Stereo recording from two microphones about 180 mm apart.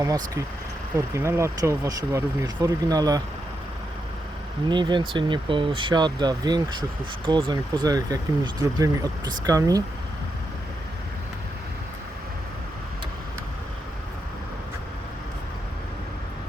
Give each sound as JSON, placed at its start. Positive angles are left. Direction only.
{"t": 0.0, "sound": "speech", "side_deg": -20}
{"t": 4.7, "sound": "speech", "side_deg": -25}